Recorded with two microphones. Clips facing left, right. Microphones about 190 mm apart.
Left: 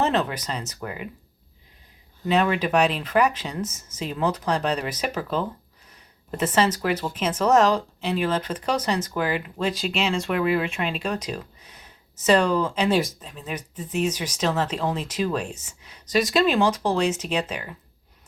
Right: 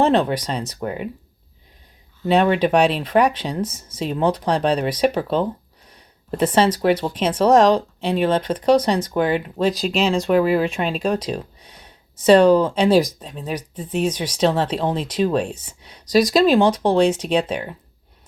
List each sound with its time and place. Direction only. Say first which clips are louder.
0.0 s speech: right 6 dB; 35° right (ahead or behind)
2.2 s speech: right 5 dB; 35° right (ahead or behind)